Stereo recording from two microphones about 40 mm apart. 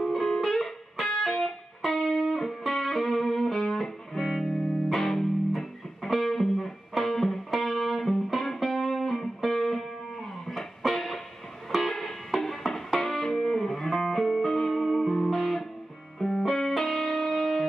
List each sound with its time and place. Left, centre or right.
0.0 s music: centre
4.6 s music: left
4.8 s music: centre
16.2 s music: left
16.5 s music: centre